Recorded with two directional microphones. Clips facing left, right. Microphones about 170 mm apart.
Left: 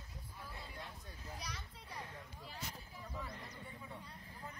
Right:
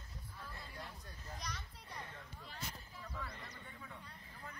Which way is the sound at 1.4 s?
5° left (ahead or behind).